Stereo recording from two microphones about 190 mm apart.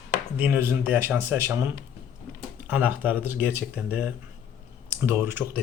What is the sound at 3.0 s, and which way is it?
Speech, 10° right (ahead or behind).